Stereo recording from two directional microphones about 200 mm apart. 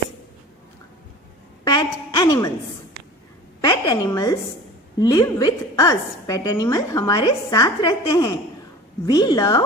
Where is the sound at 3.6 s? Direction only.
20° left (ahead or behind).